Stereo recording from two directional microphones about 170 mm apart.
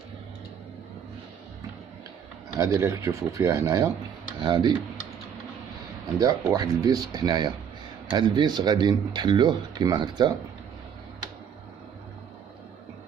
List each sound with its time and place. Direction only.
2.5 s speech: 20° right (ahead or behind)
6.1 s speech: 20° right (ahead or behind)